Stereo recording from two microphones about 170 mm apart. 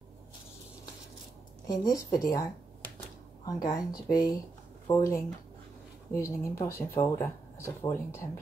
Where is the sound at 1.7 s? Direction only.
20° left (ahead or behind).